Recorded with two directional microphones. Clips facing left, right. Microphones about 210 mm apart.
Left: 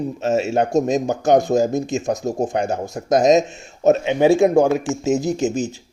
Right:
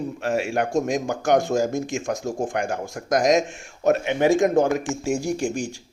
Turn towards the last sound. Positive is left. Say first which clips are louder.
# left 4 dB
turn(degrees=-10)  # may be behind; listen again after turning